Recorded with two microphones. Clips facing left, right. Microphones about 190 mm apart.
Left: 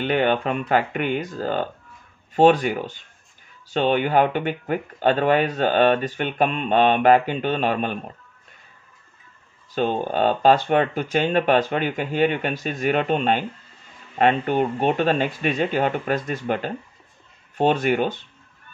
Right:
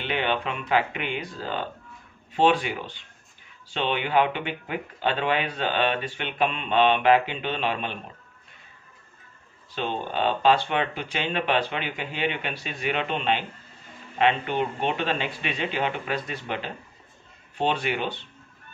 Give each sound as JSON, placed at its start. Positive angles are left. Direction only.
{"t": 0.0, "sound": "speech", "side_deg": 45}
{"t": 9.7, "sound": "speech", "side_deg": 45}